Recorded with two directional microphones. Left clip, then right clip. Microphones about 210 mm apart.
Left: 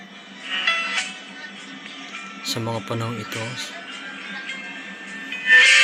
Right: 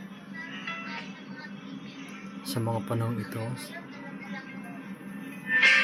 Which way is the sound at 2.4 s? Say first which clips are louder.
Left 5 dB; 15° right (ahead or behind).